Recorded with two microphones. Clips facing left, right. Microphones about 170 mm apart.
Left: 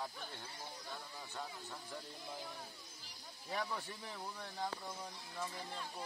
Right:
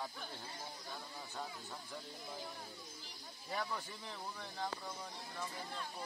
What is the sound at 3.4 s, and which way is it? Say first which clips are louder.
Speech: even; centre (ahead or behind).